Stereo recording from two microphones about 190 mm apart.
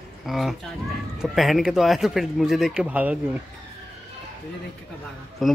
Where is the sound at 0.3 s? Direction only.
Centre (ahead or behind).